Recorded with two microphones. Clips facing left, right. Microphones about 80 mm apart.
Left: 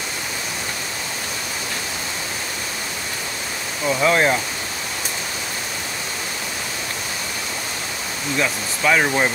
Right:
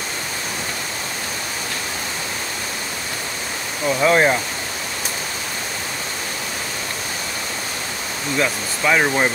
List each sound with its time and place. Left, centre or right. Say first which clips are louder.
3.8 s speech: right 2 dB; centre
8.4 s speech: right 1 dB; centre